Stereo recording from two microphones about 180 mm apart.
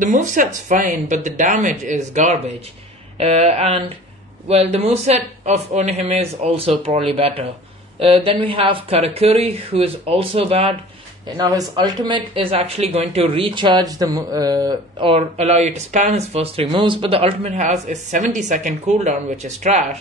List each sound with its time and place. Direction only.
0.0 s speech: 45° right (ahead or behind)
11.2 s speech: 20° right (ahead or behind)
15.1 s speech: 35° right (ahead or behind)